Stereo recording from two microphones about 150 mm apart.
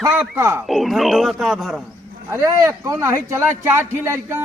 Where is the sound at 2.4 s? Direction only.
20° right (ahead or behind).